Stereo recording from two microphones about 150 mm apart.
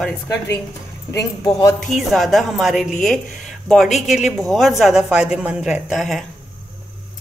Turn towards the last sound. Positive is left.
turn(degrees=0)  # may be behind; listen again after turning